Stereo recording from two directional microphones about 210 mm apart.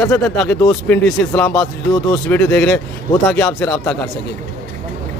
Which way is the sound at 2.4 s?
5° left (ahead or behind).